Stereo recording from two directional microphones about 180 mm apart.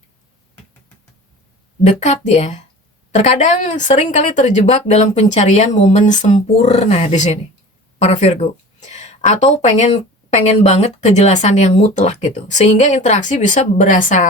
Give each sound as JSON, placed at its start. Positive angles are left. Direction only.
{"t": 1.9, "sound": "speech", "side_deg": 40}